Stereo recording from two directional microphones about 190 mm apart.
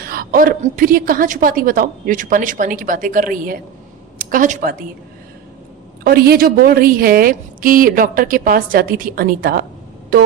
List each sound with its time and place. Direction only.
0.0 s a woman's voice: 50° right (ahead or behind)
6.1 s a woman's voice: 55° right (ahead or behind)